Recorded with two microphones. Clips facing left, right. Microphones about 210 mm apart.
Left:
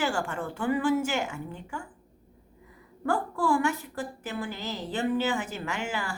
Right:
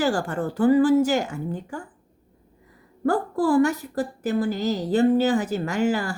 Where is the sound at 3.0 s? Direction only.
40° right (ahead or behind).